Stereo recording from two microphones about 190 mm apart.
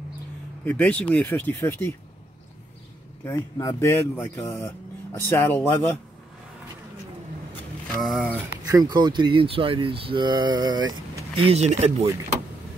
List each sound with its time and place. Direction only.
0.7 s speech: 10° left (ahead or behind)
3.3 s speech: 15° left (ahead or behind)
7.9 s speech: centre (ahead or behind)
8.6 s speech: 20° right (ahead or behind)
11.4 s speech: 35° right (ahead or behind)